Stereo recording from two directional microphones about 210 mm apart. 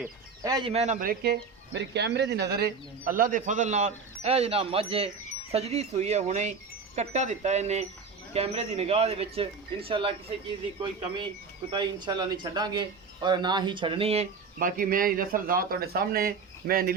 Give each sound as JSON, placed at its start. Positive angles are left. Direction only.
{"t": 0.4, "sound": "speech", "side_deg": -15}
{"t": 0.7, "sound": "speech", "side_deg": -30}